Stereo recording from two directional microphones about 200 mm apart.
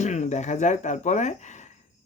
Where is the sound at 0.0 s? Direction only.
35° left (ahead or behind).